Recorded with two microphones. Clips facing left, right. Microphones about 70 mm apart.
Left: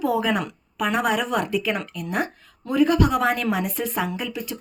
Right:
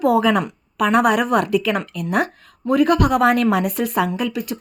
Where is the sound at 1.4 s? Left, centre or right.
Right.